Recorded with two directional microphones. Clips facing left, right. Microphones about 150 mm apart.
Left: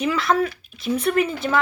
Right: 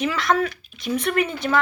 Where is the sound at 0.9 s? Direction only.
35° left (ahead or behind).